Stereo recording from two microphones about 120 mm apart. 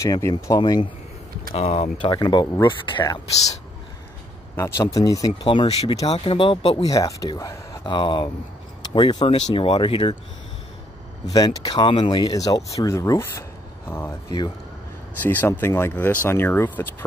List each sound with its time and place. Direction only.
0.0 s speech: 30° left (ahead or behind)
1.5 s speech: 60° left (ahead or behind)
2.1 s speech: 35° left (ahead or behind)
4.6 s speech: 25° left (ahead or behind)
5.7 s speech: 60° left (ahead or behind)
6.8 s speech: 30° left (ahead or behind)
9.2 s speech: 50° left (ahead or behind)
11.2 s speech: 30° left (ahead or behind)
15.2 s speech: 20° left (ahead or behind)